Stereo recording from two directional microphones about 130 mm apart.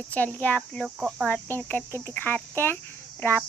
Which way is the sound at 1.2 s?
15° left (ahead or behind).